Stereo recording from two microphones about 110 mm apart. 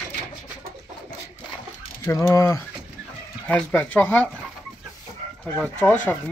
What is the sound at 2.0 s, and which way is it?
Mechanisms, 25° left (ahead or behind).